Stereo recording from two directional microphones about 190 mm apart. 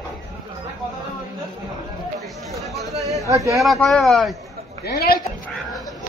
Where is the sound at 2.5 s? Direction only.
Centre (ahead or behind).